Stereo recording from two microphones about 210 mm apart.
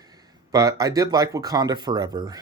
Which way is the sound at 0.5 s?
15° right (ahead or behind).